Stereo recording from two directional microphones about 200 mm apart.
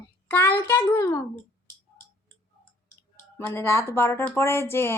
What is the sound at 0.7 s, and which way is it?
Speech, 10° left (ahead or behind).